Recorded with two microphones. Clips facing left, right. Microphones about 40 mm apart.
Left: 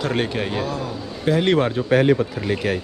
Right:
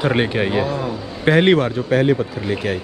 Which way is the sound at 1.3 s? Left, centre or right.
Right.